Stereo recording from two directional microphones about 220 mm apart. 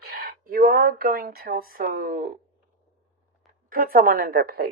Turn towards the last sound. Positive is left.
turn(degrees=-45)  # may be behind; listen again after turning